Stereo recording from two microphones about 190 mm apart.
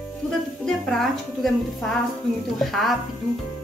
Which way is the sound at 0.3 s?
5° left (ahead or behind).